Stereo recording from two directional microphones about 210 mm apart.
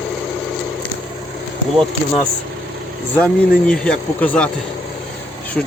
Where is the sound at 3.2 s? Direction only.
5° left (ahead or behind).